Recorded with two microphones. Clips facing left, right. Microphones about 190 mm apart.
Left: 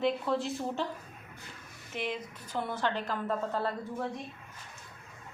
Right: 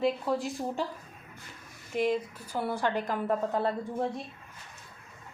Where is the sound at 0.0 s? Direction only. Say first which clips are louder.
Right 1 dB; 5° right (ahead or behind).